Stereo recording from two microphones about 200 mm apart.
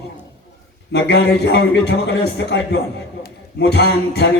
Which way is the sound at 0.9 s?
60° left (ahead or behind).